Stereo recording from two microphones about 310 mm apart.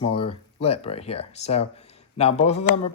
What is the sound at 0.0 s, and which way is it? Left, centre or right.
Speech, centre.